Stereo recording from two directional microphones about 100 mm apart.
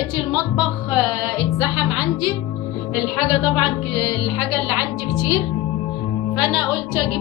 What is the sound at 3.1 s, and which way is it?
Speech, 10° right (ahead or behind).